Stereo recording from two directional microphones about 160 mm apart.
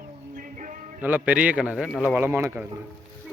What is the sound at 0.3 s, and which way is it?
Music, 55° right (ahead or behind).